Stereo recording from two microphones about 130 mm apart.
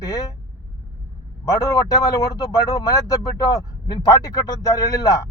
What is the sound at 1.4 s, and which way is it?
A man's voice, 25° left (ahead or behind).